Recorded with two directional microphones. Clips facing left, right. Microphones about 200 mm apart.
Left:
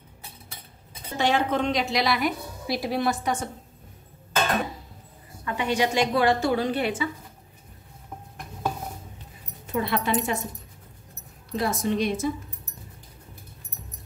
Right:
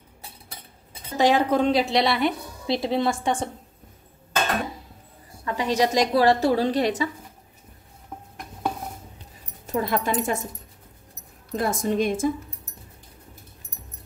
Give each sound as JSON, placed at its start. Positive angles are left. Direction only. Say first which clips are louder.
{"t": 1.1, "sound": "a woman's voice", "louder": "right 4 dB", "side_deg": -35}
{"t": 5.4, "sound": "a woman's voice", "louder": "right 2 dB", "side_deg": -35}
{"t": 9.7, "sound": "a woman's voice", "louder": "right 1 dB", "side_deg": -45}
{"t": 11.5, "sound": "a woman's voice", "louder": "right 2 dB", "side_deg": -50}